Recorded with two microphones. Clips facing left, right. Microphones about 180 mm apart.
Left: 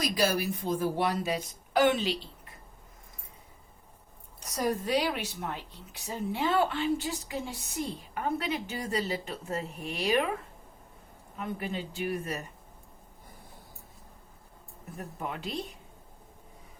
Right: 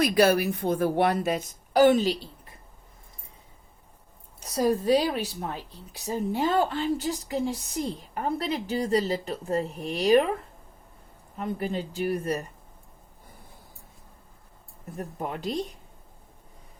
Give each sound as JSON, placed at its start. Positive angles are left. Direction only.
{"t": 0.0, "sound": "speech", "side_deg": -60}
{"t": 1.7, "sound": "speech", "side_deg": -40}
{"t": 4.4, "sound": "speech", "side_deg": -30}
{"t": 11.3, "sound": "speech", "side_deg": -40}
{"t": 14.9, "sound": "speech", "side_deg": -40}